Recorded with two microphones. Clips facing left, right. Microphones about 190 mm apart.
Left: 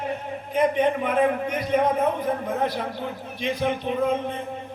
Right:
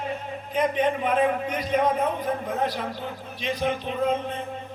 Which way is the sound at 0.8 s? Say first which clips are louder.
Left 1 dB; 55° left (ahead or behind).